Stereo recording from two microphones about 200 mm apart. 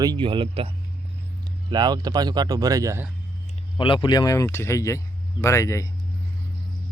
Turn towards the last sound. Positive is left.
turn(degrees=15)  # may be behind; listen again after turning